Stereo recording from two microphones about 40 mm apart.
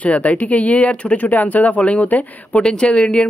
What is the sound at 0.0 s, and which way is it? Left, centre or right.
Speech, left.